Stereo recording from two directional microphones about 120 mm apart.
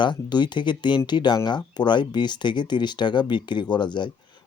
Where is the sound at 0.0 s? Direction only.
40° left (ahead or behind).